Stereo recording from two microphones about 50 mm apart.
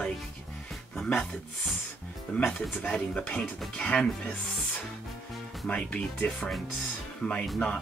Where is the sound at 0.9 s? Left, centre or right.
Centre.